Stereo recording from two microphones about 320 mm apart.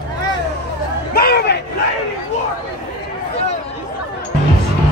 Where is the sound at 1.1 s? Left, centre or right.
Left.